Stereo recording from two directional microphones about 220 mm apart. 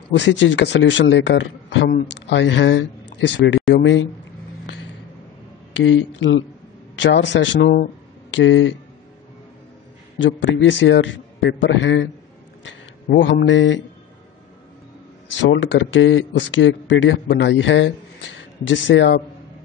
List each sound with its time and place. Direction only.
0.1 s speech: 55° left (ahead or behind)
5.7 s speech: 60° left (ahead or behind)
8.3 s speech: 60° left (ahead or behind)
10.1 s speech: 55° left (ahead or behind)
15.5 s speech: 60° left (ahead or behind)